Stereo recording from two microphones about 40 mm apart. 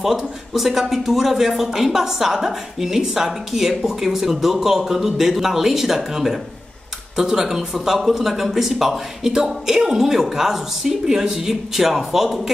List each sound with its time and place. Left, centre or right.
0.0 s a man's voice: centre